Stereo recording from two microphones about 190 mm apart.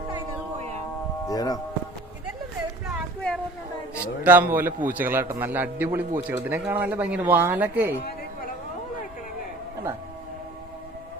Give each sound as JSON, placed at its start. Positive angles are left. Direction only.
{"t": 0.1, "sound": "a sound", "side_deg": -35}
{"t": 1.3, "sound": "speech", "side_deg": 20}
{"t": 3.9, "sound": "a man's voice", "side_deg": -10}